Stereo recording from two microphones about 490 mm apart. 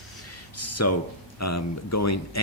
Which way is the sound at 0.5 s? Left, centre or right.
Left.